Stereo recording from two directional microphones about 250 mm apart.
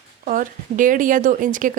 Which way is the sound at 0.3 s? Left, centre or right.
Right.